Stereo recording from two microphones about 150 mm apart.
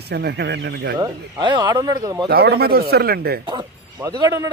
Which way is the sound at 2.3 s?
90° right.